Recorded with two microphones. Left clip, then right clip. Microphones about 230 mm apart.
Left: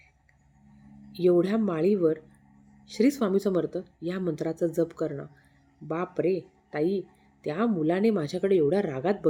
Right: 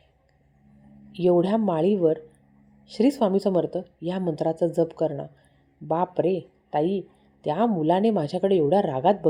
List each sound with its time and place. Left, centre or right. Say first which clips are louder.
1.1 s speech: right 2 dB; centre